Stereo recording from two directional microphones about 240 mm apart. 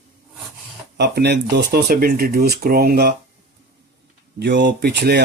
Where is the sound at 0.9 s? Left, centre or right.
Right.